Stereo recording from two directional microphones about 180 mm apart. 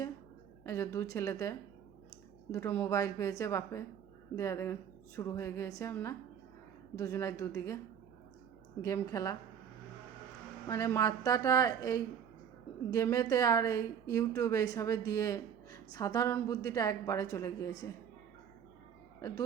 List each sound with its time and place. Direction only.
0.6 s a woman's voice: 15° left (ahead or behind)
8.8 s a woman's voice: 15° left (ahead or behind)
10.7 s a woman's voice: 15° left (ahead or behind)